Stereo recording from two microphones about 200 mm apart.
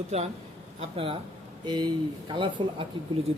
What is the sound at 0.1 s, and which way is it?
Speech, 30° right (ahead or behind).